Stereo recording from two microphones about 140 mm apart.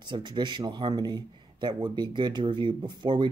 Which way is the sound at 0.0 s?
30° right (ahead or behind).